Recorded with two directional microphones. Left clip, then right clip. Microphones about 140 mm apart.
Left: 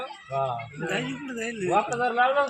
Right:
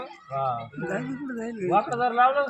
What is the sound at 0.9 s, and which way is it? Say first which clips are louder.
Speech: left 2 dB; 50° right (ahead or behind).